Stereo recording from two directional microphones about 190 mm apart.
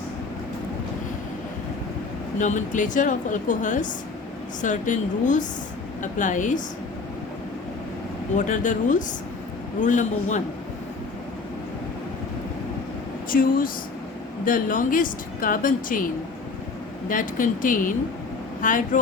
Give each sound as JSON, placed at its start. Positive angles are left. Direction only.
{"t": 2.4, "sound": "a woman's voice", "side_deg": 40}
{"t": 8.4, "sound": "a woman's voice", "side_deg": 40}
{"t": 13.3, "sound": "speech", "side_deg": 50}
{"t": 17.1, "sound": "speech", "side_deg": 45}